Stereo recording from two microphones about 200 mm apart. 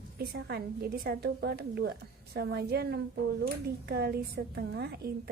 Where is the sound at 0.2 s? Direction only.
55° right (ahead or behind).